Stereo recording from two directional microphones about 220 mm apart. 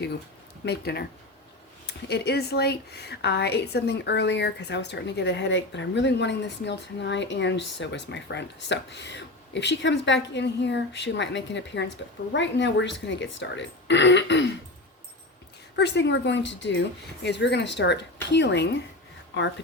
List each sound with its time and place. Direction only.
0.6 s speech: 45° left (ahead or behind)
15.7 s a woman's voice: 50° left (ahead or behind)